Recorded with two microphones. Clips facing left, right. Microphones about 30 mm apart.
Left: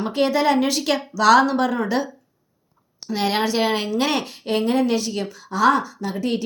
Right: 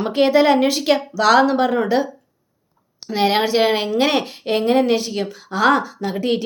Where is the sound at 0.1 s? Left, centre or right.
Right.